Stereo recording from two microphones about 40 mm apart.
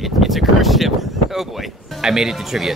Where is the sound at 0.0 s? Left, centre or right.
Centre.